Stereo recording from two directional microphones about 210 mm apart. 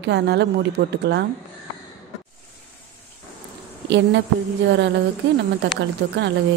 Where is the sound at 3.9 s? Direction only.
55° right (ahead or behind).